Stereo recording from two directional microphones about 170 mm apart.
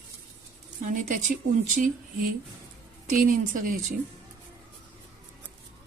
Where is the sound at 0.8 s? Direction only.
45° right (ahead or behind).